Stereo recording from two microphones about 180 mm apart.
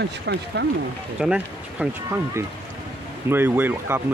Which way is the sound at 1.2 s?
5° right (ahead or behind).